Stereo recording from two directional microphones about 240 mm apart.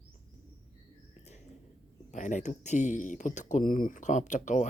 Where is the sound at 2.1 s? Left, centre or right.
Left.